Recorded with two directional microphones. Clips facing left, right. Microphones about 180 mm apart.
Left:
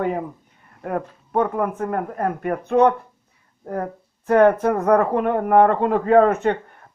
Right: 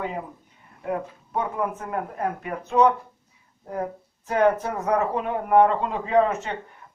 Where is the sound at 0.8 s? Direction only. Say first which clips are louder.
Left 2 dB; 55° left (ahead or behind).